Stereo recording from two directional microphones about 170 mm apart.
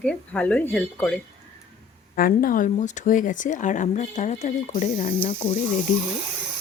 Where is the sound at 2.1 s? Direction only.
55° left (ahead or behind).